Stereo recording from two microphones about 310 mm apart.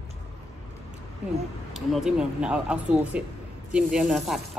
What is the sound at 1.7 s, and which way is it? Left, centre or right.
Speech, centre.